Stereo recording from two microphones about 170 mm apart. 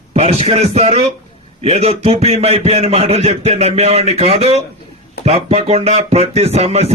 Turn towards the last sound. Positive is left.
turn(degrees=-40)  # may be behind; listen again after turning